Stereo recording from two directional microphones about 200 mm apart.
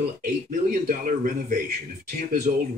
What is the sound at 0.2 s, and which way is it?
Speech, 45° right (ahead or behind).